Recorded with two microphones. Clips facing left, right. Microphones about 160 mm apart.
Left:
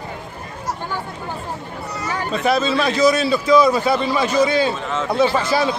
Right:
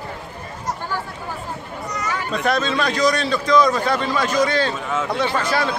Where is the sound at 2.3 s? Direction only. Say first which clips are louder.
Left 3 dB; 5° left (ahead or behind).